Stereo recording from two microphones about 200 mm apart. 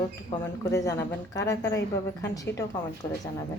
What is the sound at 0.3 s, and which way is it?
A woman's voice, 10° left (ahead or behind).